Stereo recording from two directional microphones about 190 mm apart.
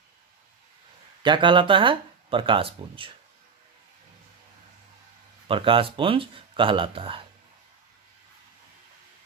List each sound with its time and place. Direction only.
1.2 s speech: 25° right (ahead or behind)
5.5 s speech: 25° right (ahead or behind)